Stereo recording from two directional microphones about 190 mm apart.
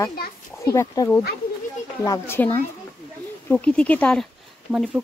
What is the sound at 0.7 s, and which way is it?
Speech, 20° left (ahead or behind).